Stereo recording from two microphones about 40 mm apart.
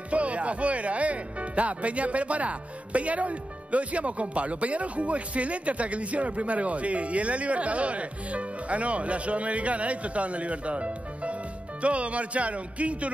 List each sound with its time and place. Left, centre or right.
0.1 s speech: right